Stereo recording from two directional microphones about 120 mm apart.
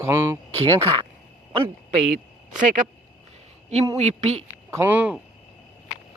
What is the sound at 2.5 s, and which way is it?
Speech, 90° right.